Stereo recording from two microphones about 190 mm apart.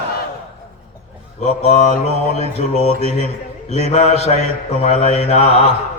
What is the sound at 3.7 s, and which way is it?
A man's voice, 35° left (ahead or behind).